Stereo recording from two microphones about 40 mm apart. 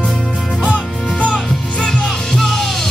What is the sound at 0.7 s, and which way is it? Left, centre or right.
Music, left.